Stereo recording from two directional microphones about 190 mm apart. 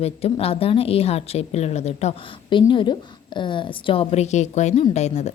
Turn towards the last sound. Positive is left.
turn(degrees=35)  # may be behind; listen again after turning